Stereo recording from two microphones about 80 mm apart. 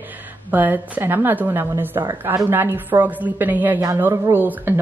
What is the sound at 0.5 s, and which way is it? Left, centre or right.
A woman's voice, right.